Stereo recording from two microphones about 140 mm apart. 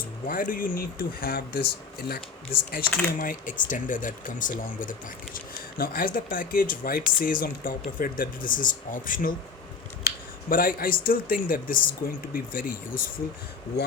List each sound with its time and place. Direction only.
0.3 s speech: 80° left
2.7 s speech: 75° left (ahead or behind)
10.5 s speech: 90° left